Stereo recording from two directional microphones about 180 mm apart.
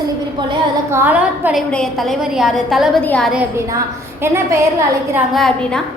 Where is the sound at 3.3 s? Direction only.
10° right (ahead or behind).